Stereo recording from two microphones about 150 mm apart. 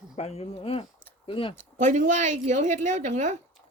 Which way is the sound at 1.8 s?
55° right (ahead or behind).